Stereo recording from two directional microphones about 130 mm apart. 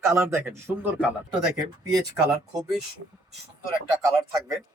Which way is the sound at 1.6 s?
30° right (ahead or behind).